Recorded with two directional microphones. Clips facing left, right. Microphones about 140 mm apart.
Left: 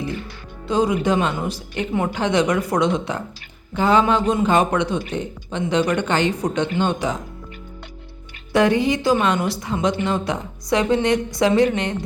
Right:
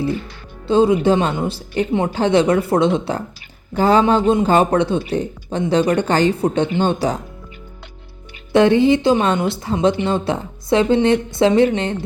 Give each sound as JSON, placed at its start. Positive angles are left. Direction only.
{"t": 0.7, "sound": "a woman's voice", "side_deg": -30}
{"t": 8.5, "sound": "a woman's voice", "side_deg": -25}